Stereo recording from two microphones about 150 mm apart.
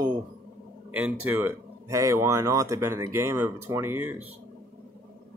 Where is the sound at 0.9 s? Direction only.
10° right (ahead or behind).